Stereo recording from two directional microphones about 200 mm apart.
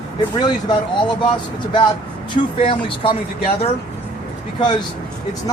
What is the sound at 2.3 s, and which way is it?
Speech, 25° left (ahead or behind).